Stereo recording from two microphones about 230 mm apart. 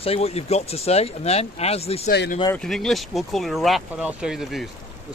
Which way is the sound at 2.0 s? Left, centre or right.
Left.